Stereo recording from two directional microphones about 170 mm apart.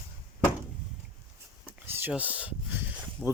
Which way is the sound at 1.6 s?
10° right (ahead or behind).